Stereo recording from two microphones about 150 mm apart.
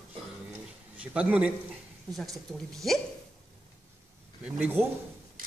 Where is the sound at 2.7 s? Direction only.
Centre (ahead or behind).